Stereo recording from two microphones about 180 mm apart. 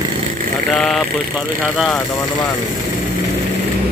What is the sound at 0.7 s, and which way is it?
Speech, centre (ahead or behind).